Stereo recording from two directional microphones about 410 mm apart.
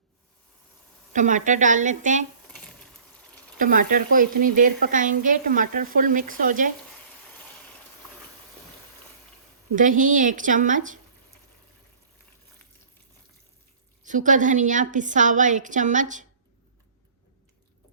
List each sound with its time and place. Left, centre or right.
1.1 s a woman's voice: centre
3.6 s speech: centre
9.7 s speech: centre
14.0 s a woman's voice: centre